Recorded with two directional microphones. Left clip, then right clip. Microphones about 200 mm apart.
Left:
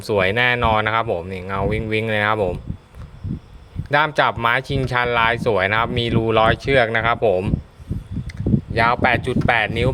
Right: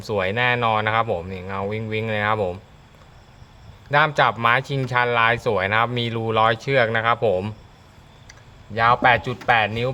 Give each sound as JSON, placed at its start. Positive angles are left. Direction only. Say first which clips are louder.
{"t": 0.0, "sound": "speech", "louder": "left 4 dB", "side_deg": 20}
{"t": 3.8, "sound": "speech", "louder": "left 1 dB", "side_deg": 20}
{"t": 8.3, "sound": "speech", "louder": "left 13 dB", "side_deg": 30}